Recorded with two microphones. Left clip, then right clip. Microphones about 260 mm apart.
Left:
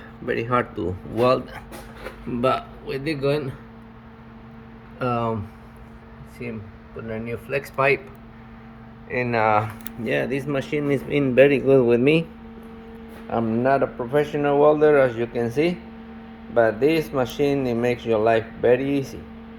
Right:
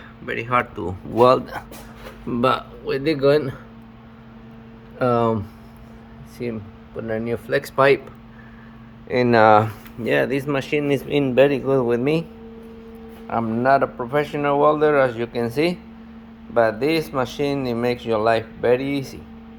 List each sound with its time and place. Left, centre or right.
0.3 s speech: centre
1.1 s speech: centre
4.9 s speech: centre
7.1 s speech: centre
9.0 s speech: right
10.0 s speech: centre
13.3 s a man's voice: centre